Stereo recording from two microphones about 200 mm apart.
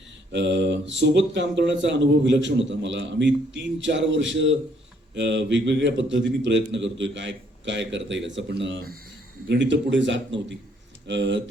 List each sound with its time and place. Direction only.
0.3 s speech: 60° right (ahead or behind)